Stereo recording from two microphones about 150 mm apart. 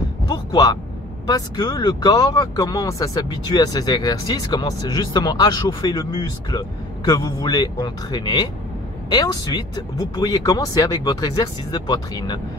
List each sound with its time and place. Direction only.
0.3 s speech: 25° left (ahead or behind)